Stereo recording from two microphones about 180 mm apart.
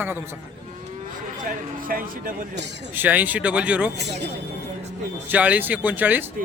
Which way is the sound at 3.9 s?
70° right (ahead or behind).